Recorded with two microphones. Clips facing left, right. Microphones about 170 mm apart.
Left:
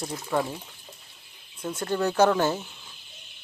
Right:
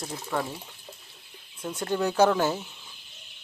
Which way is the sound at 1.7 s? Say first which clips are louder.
Left 1 dB; 10° right (ahead or behind).